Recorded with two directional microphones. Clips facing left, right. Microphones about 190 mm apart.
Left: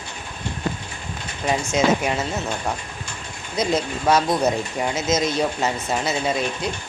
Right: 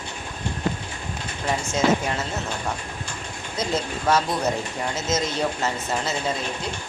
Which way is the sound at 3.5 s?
15° left (ahead or behind).